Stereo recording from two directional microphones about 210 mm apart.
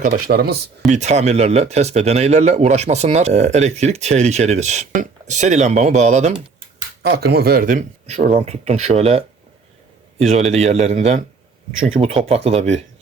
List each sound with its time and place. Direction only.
0.0 s speech: 45° right (ahead or behind)
0.9 s speech: 35° right (ahead or behind)
7.0 s a man's voice: 50° right (ahead or behind); by 12.8 s 30° right (ahead or behind)